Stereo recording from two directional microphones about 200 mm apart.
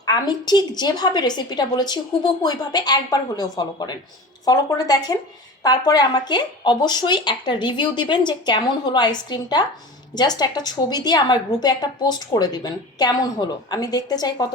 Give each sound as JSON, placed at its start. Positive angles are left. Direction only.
{"t": 0.0, "sound": "a woman's voice", "side_deg": 20}